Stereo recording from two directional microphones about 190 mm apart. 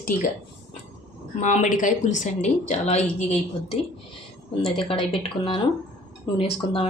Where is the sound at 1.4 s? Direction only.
40° left (ahead or behind).